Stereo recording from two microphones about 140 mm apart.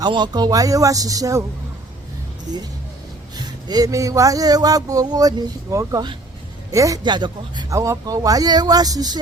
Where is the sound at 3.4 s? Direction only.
30° right (ahead or behind).